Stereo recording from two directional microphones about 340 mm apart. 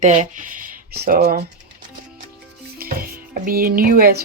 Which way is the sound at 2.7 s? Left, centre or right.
Right.